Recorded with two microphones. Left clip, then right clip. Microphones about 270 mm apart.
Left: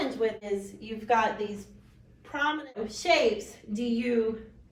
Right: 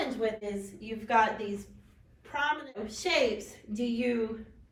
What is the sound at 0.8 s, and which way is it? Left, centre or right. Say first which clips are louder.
Speech: even; left.